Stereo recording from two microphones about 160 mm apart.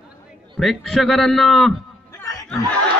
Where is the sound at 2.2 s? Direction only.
20° left (ahead or behind).